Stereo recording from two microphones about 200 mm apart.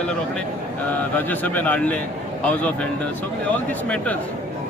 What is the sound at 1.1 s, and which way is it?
A man's voice, 10° left (ahead or behind).